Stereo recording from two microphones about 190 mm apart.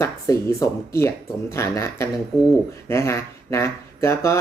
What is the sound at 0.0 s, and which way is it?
Speech, 15° left (ahead or behind).